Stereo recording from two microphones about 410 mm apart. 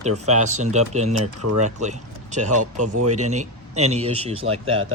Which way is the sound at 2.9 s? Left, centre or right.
Right.